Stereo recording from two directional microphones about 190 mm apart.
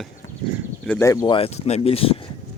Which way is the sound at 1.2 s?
30° left (ahead or behind).